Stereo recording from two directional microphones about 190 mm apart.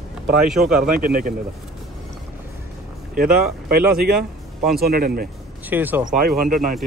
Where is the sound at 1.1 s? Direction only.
50° right (ahead or behind).